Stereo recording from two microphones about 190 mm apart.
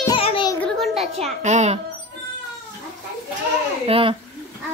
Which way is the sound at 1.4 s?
35° right (ahead or behind).